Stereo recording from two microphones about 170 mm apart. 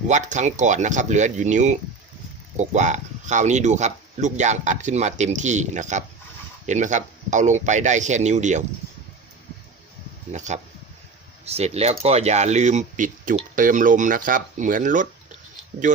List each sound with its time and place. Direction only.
0.1 s speech: 45° right (ahead or behind)
10.3 s speech: 45° right (ahead or behind)